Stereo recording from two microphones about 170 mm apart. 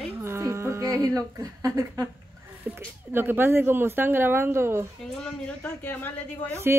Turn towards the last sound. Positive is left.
turn(degrees=-15)  # may be behind; listen again after turning